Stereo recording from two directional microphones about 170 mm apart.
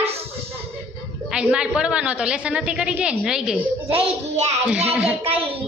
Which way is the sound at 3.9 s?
35° right (ahead or behind).